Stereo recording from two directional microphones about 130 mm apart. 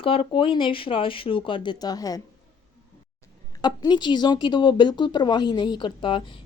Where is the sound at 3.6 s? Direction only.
35° left (ahead or behind).